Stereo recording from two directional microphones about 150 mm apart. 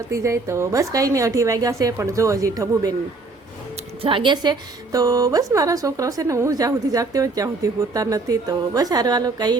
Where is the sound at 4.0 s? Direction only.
35° right (ahead or behind).